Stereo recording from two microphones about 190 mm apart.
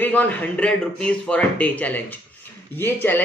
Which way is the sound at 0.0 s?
10° left (ahead or behind).